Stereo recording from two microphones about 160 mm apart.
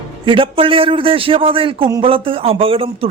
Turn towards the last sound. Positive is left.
turn(degrees=-35)  # may be behind; listen again after turning